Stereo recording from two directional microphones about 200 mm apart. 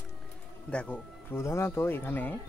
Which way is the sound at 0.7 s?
5° left (ahead or behind).